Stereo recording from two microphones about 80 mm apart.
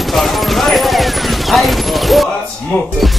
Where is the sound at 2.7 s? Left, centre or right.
Centre.